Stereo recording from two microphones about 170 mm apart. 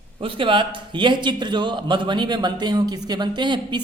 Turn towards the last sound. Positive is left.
turn(degrees=-25)  # may be behind; listen again after turning